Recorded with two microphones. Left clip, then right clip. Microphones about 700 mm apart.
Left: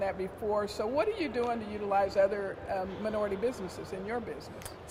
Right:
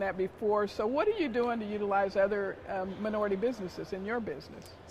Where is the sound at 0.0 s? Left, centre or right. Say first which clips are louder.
Right 2 dB; right.